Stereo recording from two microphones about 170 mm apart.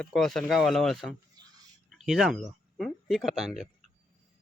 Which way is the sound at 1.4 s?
20° right (ahead or behind).